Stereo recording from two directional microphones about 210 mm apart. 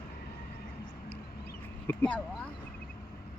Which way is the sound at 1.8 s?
10° left (ahead or behind).